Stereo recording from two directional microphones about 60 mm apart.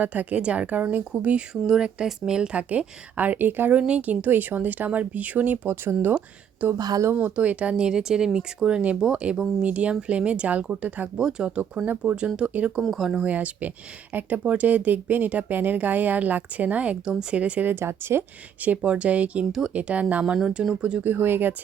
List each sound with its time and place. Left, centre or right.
0.0 s a woman's voice: right
1.6 s a woman's voice: centre; by 5.5 s right
5.6 s a woman's voice: right
11.2 s a woman's voice: centre
12.9 s speech: centre
13.2 s a woman's voice: right
17.7 s speech: right
18.6 s a woman's voice: right
21.0 s speech: right